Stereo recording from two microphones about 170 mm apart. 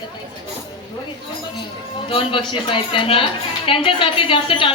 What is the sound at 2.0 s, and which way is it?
A woman's voice, 30° left (ahead or behind).